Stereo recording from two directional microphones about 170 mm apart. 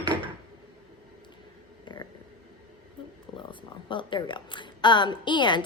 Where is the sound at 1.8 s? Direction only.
25° left (ahead or behind).